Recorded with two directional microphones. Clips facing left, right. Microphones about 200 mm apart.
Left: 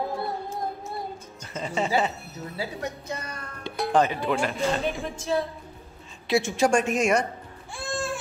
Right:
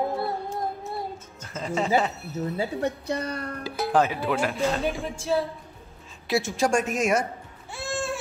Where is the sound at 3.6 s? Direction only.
5° right (ahead or behind).